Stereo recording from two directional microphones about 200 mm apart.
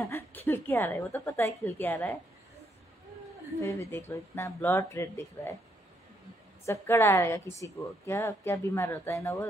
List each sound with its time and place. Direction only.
0.0 s a sound: 15° left (ahead or behind)
0.5 s speech: 10° left (ahead or behind)
4.1 s speech: 15° left (ahead or behind)
6.6 s speech: 15° left (ahead or behind)